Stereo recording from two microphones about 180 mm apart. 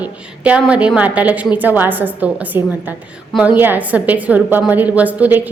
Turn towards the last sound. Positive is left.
turn(degrees=-10)  # may be behind; listen again after turning